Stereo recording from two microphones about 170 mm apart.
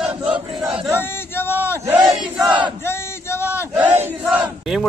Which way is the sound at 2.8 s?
15° left (ahead or behind).